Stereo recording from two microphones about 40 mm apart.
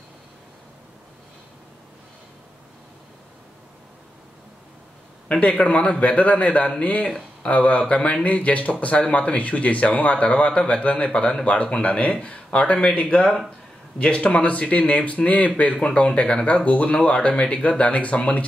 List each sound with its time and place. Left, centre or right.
5.4 s speech: left